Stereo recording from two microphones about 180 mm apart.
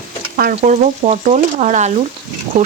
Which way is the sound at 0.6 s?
40° right (ahead or behind).